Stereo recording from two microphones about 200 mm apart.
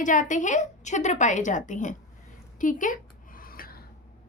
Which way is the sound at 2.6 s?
40° left (ahead or behind).